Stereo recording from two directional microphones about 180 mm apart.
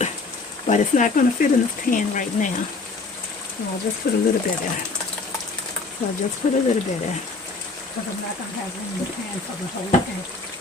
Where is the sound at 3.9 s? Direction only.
55° left (ahead or behind).